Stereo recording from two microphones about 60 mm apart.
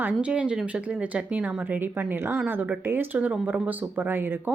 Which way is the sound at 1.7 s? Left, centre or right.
Right.